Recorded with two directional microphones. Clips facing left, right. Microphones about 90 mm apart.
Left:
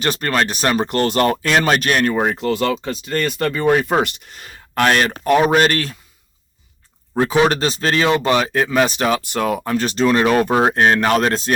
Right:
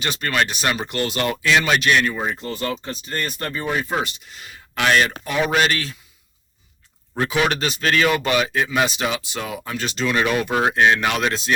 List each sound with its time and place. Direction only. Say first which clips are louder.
0.0 s speech: left 3 dB; 45° left (ahead or behind)
2.1 s speech: left 8 dB; 70° left (ahead or behind)
3.9 s speech: left 6 dB; 50° left (ahead or behind)
7.1 s speech: left 5 dB; 30° left (ahead or behind)
8.5 s speech: left 4 dB; 40° left (ahead or behind)